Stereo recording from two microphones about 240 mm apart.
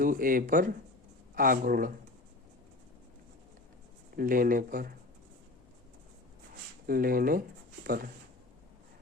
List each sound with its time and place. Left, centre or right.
0.0 s speech: right
4.2 s speech: right
6.8 s speech: right